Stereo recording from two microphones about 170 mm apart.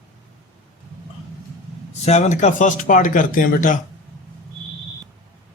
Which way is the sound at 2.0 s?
40° left (ahead or behind).